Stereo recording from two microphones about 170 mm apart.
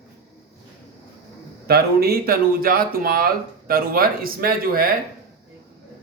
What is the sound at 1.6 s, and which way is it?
Speech, 65° right (ahead or behind).